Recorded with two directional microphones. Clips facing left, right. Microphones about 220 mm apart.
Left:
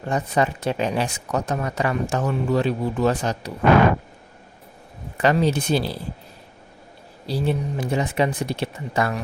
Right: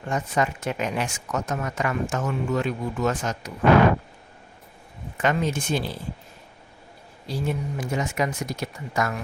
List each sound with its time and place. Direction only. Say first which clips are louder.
0.1 s speech: left 3 dB; 35° left (ahead or behind)
5.1 s speech: left 5 dB; 35° left (ahead or behind)
7.3 s speech: left 4 dB; 35° left (ahead or behind)